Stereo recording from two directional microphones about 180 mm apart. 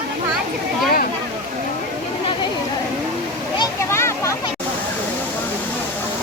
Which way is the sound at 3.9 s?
15° left (ahead or behind).